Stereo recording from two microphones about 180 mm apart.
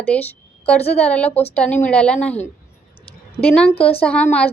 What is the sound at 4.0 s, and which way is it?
Speech, 10° left (ahead or behind).